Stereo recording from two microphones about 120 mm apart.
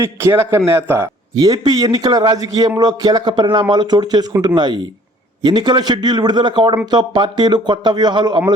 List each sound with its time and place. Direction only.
0.0 s a man's voice: 25° right (ahead or behind)
1.6 s a man's voice: 35° right (ahead or behind)